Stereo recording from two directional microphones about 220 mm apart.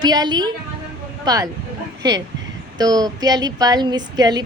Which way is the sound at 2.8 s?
20° right (ahead or behind).